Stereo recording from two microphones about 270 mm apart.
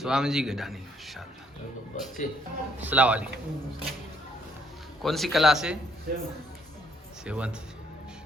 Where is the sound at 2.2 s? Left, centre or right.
Left.